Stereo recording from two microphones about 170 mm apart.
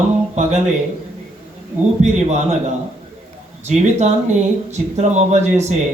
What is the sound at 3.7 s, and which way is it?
Speech, 40° right (ahead or behind).